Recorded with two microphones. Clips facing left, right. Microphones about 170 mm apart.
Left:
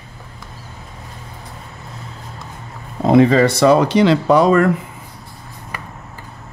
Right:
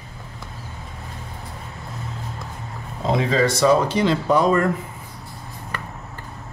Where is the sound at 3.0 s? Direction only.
60° left (ahead or behind); by 4.7 s 80° left.